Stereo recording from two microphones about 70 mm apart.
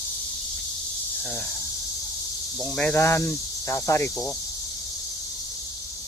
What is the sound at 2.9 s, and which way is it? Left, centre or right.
Speech, left.